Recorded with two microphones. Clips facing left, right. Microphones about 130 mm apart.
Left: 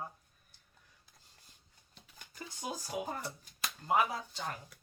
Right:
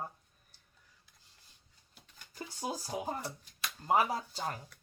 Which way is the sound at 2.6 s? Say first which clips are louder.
Right 1 dB; 35° right (ahead or behind).